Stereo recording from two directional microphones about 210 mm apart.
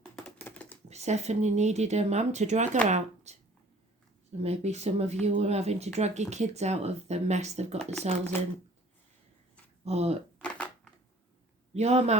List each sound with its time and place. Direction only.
0.3 s typing: 5° left (ahead or behind)
0.9 s speech: 30° right (ahead or behind)
4.4 s speech: 30° right (ahead or behind)
9.8 s speech: 30° right (ahead or behind)
10.3 s shuffling cards: 5° left (ahead or behind)
11.7 s speech: 30° right (ahead or behind)